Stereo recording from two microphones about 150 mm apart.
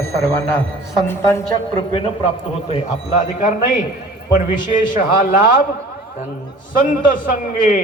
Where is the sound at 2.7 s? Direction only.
55° left (ahead or behind).